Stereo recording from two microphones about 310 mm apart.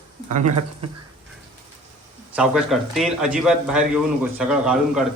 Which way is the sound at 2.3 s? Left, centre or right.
Centre.